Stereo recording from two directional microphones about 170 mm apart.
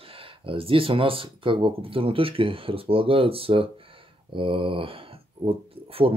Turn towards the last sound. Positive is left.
turn(degrees=-35)  # may be behind; listen again after turning